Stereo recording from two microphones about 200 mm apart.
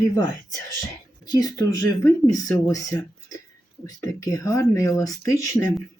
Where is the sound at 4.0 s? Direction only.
15° left (ahead or behind).